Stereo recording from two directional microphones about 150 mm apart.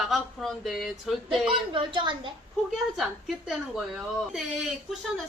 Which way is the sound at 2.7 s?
Centre (ahead or behind).